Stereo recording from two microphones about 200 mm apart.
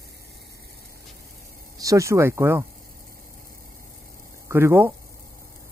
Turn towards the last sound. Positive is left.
turn(degrees=-10)  # may be behind; listen again after turning